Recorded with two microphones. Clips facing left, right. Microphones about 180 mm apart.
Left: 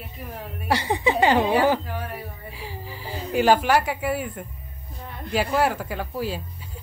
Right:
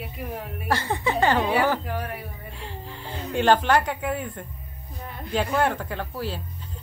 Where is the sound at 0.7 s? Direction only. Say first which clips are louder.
Left 3 dB; 15° left (ahead or behind).